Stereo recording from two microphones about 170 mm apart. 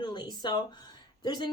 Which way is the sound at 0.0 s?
25° left (ahead or behind).